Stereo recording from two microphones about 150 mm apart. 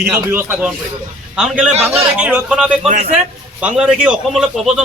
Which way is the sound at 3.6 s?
10° right (ahead or behind).